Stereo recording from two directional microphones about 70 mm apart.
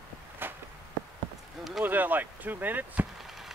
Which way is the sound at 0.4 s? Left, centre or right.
Right.